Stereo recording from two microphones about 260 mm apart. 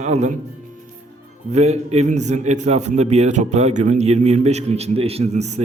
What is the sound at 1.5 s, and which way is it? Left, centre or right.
A man's voice, right.